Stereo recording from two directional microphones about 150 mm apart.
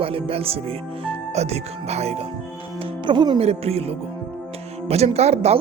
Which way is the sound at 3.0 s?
30° right (ahead or behind).